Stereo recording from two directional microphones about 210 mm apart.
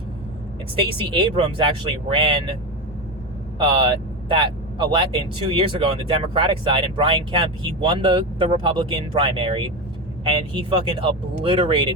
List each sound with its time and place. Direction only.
0.8 s speech: 25° right (ahead or behind)
3.6 s speech: 25° right (ahead or behind)